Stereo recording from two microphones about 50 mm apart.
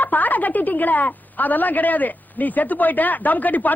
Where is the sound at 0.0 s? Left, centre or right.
Left.